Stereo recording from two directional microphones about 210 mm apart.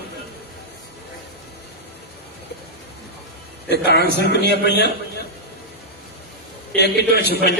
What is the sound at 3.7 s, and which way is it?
A man's voice, 50° left (ahead or behind).